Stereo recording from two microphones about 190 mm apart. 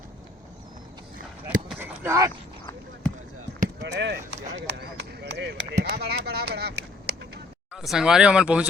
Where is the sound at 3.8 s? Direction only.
70° right (ahead or behind).